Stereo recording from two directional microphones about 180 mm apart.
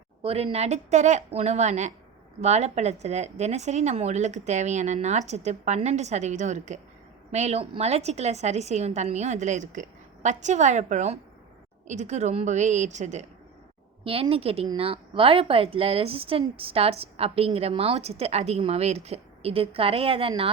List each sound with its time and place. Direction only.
0.2 s a woman's voice: 30° right (ahead or behind)
14.0 s a woman's voice: 30° right (ahead or behind)